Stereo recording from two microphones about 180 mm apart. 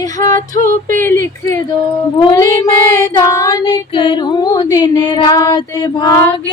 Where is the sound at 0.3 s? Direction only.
50° right (ahead or behind).